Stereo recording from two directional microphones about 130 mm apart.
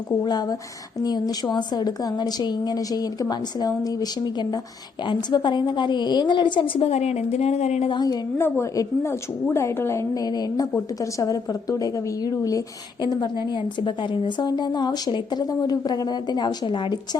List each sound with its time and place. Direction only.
1.0 s a woman's voice: 30° left (ahead or behind); by 7.9 s 55° left (ahead or behind)
7.9 s a woman's voice: 35° left (ahead or behind)
8.4 s a woman's voice: 20° left (ahead or behind); by 17.0 s 35° left (ahead or behind)